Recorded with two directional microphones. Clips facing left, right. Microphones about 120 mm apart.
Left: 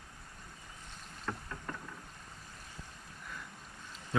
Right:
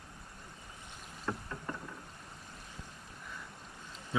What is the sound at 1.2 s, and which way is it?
Boat, 20° right (ahead or behind).